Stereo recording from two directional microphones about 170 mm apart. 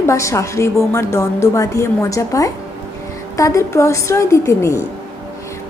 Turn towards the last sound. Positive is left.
turn(degrees=15)  # may be behind; listen again after turning